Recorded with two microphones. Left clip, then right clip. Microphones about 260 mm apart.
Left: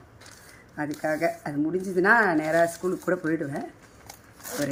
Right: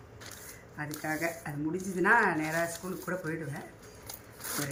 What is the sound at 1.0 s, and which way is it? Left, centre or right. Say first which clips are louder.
Speech: left 8 dB; left.